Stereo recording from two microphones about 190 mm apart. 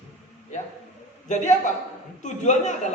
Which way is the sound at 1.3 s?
40° left (ahead or behind).